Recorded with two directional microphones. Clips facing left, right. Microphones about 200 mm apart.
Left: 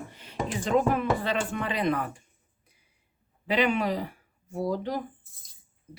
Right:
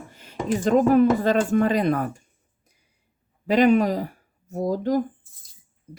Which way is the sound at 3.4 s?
45° right (ahead or behind).